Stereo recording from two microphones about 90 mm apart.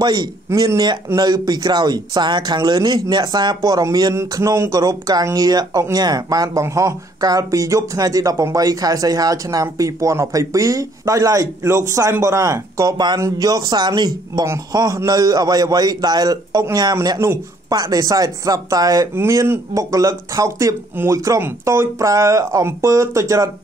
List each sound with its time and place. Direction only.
0.0 s speech: 50° right (ahead or behind)
0.5 s speech: 30° right (ahead or behind)
1.1 s speech: 45° right (ahead or behind)
19.1 s speech: 30° right (ahead or behind)